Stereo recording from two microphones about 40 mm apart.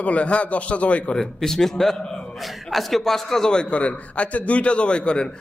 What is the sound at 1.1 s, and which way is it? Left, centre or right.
A man's voice, centre.